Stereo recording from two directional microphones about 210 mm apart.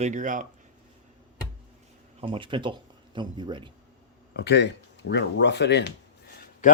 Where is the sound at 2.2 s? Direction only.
25° right (ahead or behind).